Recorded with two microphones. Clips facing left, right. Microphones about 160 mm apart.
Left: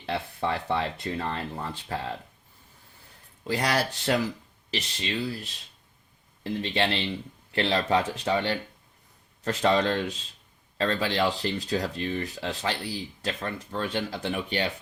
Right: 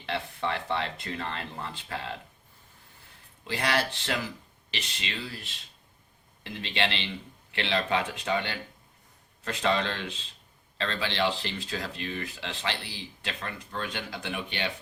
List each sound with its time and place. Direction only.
0.0 s speech: 40° left (ahead or behind)
3.4 s speech: 40° left (ahead or behind)